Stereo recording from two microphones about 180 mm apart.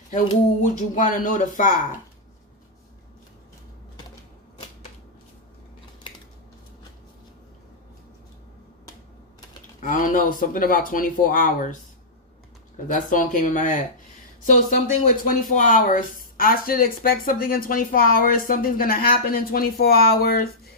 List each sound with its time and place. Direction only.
0.6 s speech: 45° left (ahead or behind)
9.8 s speech: 45° left (ahead or behind)
12.9 s speech: 45° left (ahead or behind)